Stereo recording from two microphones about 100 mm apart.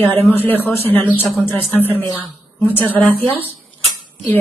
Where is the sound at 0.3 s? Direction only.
20° left (ahead or behind).